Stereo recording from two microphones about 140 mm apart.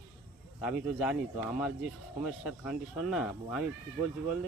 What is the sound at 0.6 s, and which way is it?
Speech, 10° right (ahead or behind).